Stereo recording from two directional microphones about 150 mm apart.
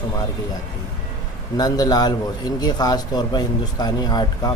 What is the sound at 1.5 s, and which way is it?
A man's voice, 25° left (ahead or behind).